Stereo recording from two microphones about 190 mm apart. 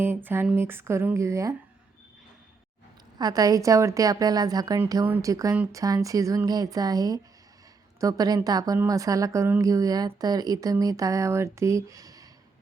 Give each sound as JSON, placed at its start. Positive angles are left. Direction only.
{"t": 0.0, "sound": "a woman's voice", "side_deg": -10}
{"t": 3.2, "sound": "a woman's voice", "side_deg": -20}